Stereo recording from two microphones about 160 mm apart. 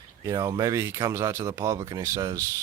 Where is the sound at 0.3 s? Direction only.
20° right (ahead or behind).